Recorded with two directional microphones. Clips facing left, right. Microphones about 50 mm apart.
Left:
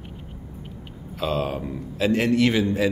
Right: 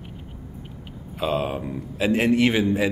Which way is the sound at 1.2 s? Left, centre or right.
Centre.